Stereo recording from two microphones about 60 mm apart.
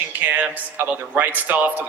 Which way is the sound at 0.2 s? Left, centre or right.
Right.